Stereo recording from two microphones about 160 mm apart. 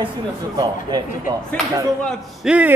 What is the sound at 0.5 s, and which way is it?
Speech, 25° right (ahead or behind).